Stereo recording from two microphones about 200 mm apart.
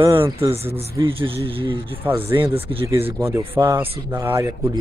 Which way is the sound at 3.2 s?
15° right (ahead or behind).